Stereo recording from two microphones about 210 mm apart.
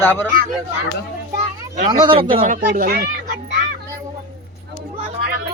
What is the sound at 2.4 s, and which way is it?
Speech, 40° right (ahead or behind).